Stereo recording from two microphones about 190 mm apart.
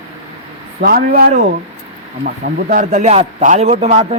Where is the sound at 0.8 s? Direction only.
55° right (ahead or behind).